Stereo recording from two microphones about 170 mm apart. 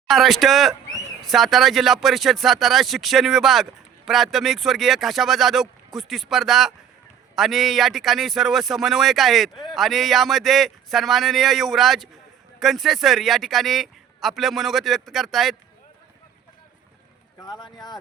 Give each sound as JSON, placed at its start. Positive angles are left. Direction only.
{"t": 0.1, "sound": "speech", "side_deg": 0}
{"t": 17.4, "sound": "speech", "side_deg": 25}